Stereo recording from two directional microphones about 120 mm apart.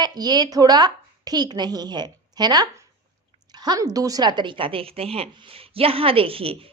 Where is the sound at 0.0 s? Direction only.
35° right (ahead or behind).